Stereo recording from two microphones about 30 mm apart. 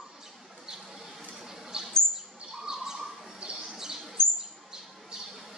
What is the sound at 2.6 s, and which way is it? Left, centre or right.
Bird, centre.